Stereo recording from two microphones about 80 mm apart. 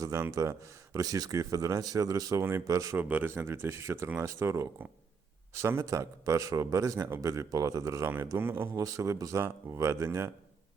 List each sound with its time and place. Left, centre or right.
0.0 s speech: right
2.4 s speech: right
2.6 s speech: right
2.9 s speech: right
8.7 s speech: right